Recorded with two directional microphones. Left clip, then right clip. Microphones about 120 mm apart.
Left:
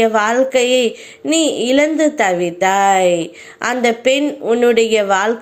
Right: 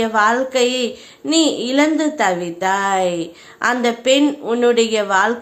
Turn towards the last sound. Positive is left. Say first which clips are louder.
# left 2 dB
turn(degrees=25)  # may be behind; listen again after turning